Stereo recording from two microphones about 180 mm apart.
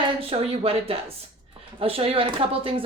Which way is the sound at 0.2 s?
30° right (ahead or behind).